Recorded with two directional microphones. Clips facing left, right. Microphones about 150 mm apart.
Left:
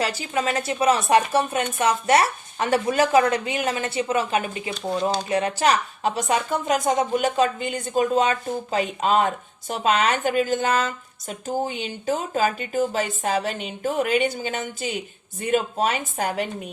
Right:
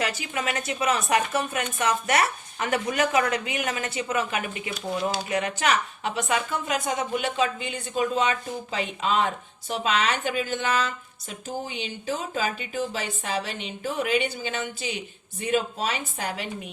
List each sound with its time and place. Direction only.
0.0 s a woman's voice: 30° left (ahead or behind); by 16.5 s 50° left (ahead or behind)